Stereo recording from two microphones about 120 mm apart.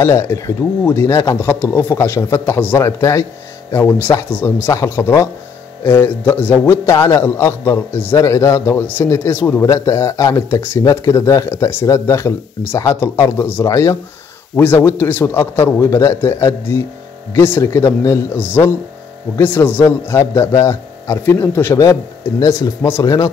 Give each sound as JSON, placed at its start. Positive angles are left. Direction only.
{"t": 0.0, "sound": "a man's voice", "side_deg": 20}